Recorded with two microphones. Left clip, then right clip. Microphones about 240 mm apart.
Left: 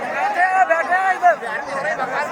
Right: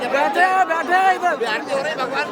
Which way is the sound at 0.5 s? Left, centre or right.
Right.